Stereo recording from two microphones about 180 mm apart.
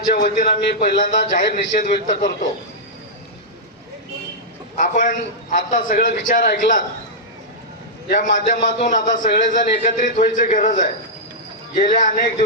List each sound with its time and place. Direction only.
0.1 s a man's voice: 45° left (ahead or behind)
4.8 s a man's voice: 45° left (ahead or behind)
8.1 s a man's voice: 45° left (ahead or behind)